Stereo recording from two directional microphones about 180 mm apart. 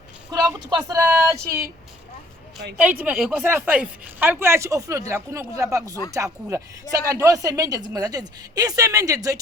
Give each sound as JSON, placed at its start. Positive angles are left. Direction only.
{"t": 0.3, "sound": "speech", "side_deg": -20}
{"t": 3.0, "sound": "speech", "side_deg": -5}